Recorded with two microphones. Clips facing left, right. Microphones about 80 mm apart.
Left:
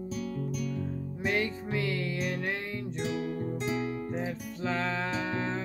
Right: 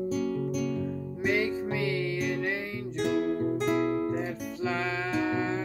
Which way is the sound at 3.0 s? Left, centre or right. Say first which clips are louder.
Right 7 dB; right.